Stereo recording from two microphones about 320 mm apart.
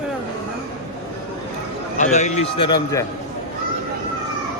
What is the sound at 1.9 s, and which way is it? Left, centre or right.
A man's voice, left.